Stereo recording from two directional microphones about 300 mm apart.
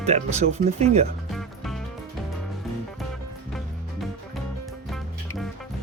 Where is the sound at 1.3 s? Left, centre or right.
Centre.